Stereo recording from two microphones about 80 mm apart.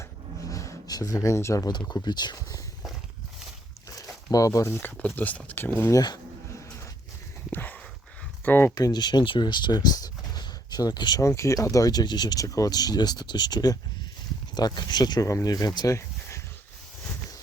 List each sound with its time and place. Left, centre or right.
0.0 s a sound: left
0.9 s speech: left
1.9 s speech: left
3.8 s a sound: left
4.7 s speech: left
7.5 s a sound: left
8.4 s speech: left
8.7 s speech: left
11.2 s speech: left
15.3 s speech: left